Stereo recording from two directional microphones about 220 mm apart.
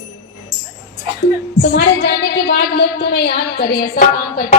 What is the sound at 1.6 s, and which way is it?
A woman's voice, 50° left (ahead or behind).